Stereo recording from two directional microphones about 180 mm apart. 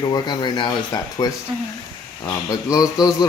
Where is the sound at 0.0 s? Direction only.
25° left (ahead or behind).